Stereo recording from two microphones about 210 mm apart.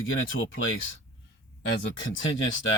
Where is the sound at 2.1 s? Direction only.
65° left (ahead or behind).